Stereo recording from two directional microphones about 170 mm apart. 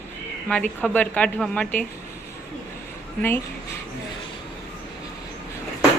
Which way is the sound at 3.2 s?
15° left (ahead or behind).